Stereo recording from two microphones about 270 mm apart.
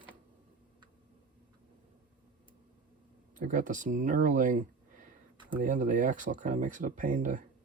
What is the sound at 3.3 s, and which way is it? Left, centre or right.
Speech, right.